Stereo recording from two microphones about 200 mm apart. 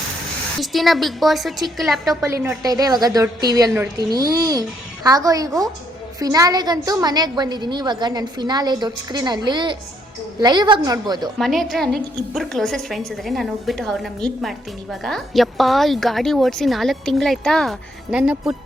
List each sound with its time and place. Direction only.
0.6 s a woman's voice: centre (ahead or behind)
2.2 s a woman's voice: 10° right (ahead or behind)
11.3 s a woman's voice: centre (ahead or behind)